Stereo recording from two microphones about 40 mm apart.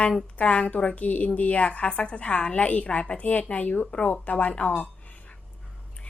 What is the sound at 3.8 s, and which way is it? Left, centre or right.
Speech, left.